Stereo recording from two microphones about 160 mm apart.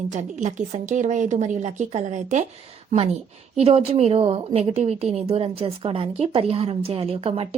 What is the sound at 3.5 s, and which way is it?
A woman's voice, 40° right (ahead or behind).